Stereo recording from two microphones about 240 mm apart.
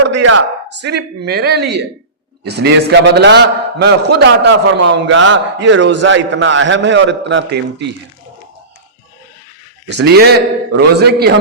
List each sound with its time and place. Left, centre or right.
0.0 s a sound: right
0.7 s a man's voice: right
9.8 s a man's voice: right